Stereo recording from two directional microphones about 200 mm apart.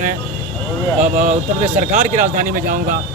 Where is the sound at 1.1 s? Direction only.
35° right (ahead or behind).